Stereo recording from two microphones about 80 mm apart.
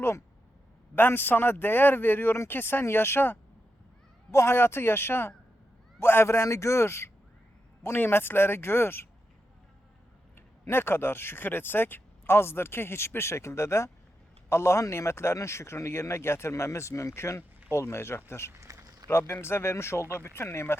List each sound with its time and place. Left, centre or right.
0.9 s a man's voice: left
10.3 s a man's voice: left
18.6 s a sound: right
19.3 s a man's voice: left